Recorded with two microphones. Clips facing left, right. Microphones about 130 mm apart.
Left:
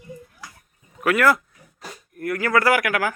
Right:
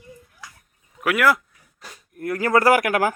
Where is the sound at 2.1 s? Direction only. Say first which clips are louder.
Even; 25° right (ahead or behind).